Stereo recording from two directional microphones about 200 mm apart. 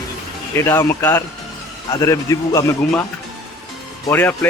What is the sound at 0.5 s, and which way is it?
Speech, 15° left (ahead or behind).